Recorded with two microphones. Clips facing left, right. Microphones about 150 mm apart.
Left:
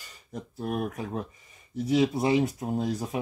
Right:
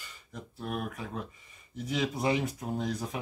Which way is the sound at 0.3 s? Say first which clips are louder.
Left 5 dB; 40° left (ahead or behind).